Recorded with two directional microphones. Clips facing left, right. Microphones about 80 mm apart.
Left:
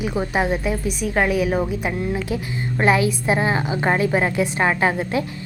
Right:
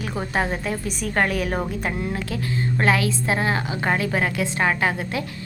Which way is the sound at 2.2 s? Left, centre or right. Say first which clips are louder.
Even; centre.